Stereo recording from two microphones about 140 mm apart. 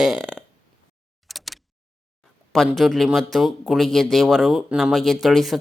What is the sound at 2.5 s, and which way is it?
Speech, centre (ahead or behind).